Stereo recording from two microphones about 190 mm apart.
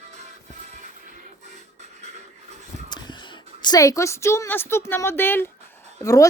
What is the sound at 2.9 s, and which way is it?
A woman's voice, 25° left (ahead or behind).